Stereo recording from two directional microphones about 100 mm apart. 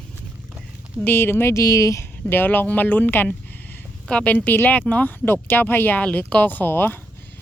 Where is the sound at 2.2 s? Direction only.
20° left (ahead or behind).